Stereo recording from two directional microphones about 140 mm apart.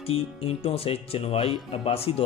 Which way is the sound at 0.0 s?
45° left (ahead or behind).